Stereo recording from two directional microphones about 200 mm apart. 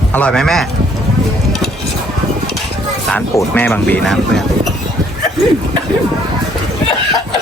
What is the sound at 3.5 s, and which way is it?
Speech, 5° left (ahead or behind).